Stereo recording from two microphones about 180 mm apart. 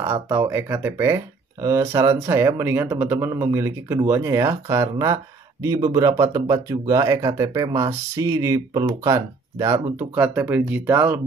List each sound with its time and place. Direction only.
0.0 s speech: 15° right (ahead or behind)